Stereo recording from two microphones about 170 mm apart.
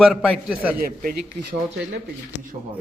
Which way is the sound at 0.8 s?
60° right (ahead or behind).